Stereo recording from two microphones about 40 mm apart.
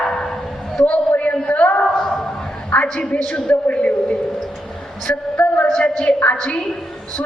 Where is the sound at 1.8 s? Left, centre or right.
Centre.